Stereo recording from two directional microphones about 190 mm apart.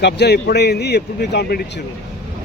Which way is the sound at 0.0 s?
60° left (ahead or behind).